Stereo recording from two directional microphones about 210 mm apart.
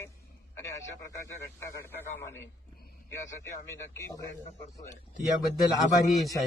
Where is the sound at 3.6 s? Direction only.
15° left (ahead or behind).